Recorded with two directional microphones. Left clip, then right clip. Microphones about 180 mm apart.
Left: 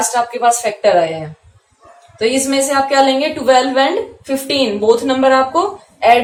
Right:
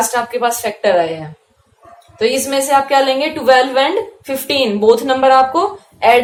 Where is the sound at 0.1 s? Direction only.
35° right (ahead or behind).